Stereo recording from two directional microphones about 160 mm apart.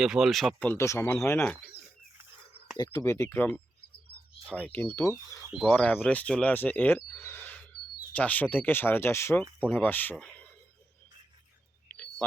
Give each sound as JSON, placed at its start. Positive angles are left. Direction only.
{"t": 0.0, "sound": "speech", "side_deg": -5}
{"t": 0.7, "sound": "speech", "side_deg": 15}
{"t": 2.7, "sound": "speech", "side_deg": 25}
{"t": 5.7, "sound": "speech", "side_deg": 5}